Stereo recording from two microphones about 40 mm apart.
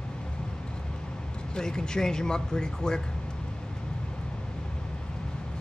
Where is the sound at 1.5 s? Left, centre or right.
Centre.